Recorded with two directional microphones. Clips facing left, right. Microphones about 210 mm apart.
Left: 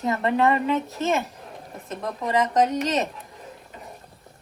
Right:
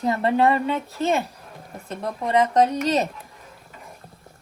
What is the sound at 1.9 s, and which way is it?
Speech, 30° right (ahead or behind).